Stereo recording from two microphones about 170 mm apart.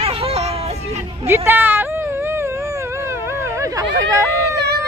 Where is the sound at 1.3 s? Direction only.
15° right (ahead or behind).